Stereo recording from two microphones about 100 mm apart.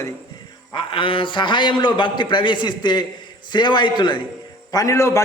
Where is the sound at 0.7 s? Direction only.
60° left (ahead or behind).